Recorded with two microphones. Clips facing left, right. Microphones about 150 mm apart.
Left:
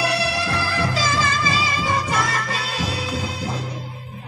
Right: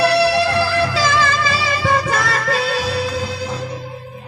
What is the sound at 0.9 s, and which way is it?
Music, 65° right (ahead or behind).